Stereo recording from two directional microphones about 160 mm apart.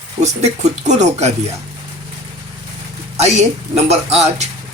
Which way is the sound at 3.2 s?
45° right (ahead or behind).